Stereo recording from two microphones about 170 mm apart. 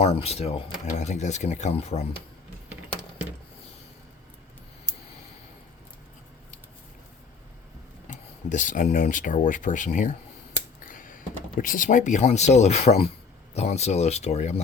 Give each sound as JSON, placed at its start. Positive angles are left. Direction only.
{"t": 0.0, "sound": "speech", "side_deg": 35}
{"t": 8.1, "sound": "speech", "side_deg": 45}
{"t": 10.8, "sound": "a sound", "side_deg": 55}
{"t": 11.6, "sound": "speech", "side_deg": 55}